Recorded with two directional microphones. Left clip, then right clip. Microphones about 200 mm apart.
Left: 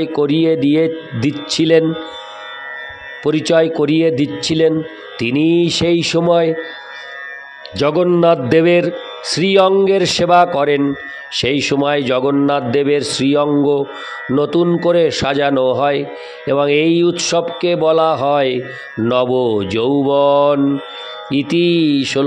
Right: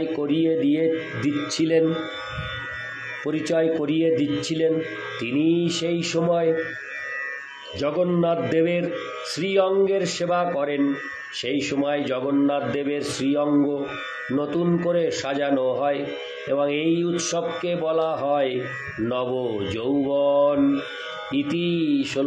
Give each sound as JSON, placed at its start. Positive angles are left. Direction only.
{"t": 0.0, "sound": "a man's voice", "side_deg": 55}
{"t": 3.3, "sound": "a man's voice", "side_deg": 50}
{"t": 7.7, "sound": "a man's voice", "side_deg": 50}